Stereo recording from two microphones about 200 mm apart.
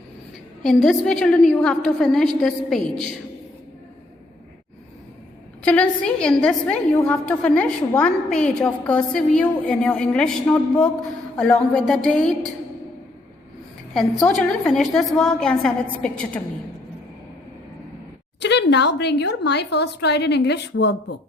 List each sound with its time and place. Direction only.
0.6 s a woman's voice: centre (ahead or behind)
5.6 s a woman's voice: 5° left (ahead or behind)
13.9 s a woman's voice: centre (ahead or behind)
18.3 s a woman's voice: 60° left (ahead or behind)